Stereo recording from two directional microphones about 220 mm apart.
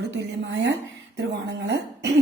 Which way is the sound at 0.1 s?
50° right (ahead or behind).